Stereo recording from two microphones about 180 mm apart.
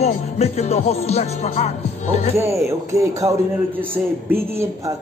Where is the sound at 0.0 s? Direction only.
35° left (ahead or behind).